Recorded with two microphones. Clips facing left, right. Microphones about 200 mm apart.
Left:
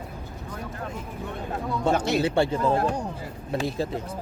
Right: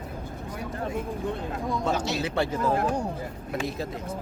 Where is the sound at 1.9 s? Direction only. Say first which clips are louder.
Left 4 dB; 55° left (ahead or behind).